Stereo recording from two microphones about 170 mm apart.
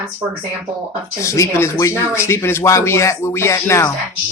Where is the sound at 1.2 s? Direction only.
15° left (ahead or behind).